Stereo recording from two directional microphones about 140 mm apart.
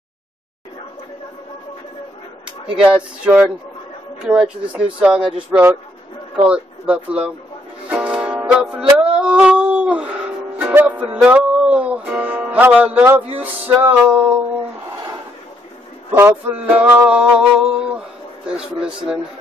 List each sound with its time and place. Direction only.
2.7 s male singing: 5° right (ahead or behind)
7.9 s music: 10° right (ahead or behind)
9.1 s dog: 5° right (ahead or behind)
10.6 s music: 10° right (ahead or behind)
13.4 s male singing: 15° right (ahead or behind)
16.1 s male singing: 15° right (ahead or behind)
18.5 s speech: 5° right (ahead or behind)